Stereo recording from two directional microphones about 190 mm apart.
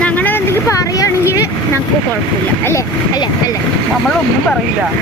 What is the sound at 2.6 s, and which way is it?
Speech, 15° left (ahead or behind).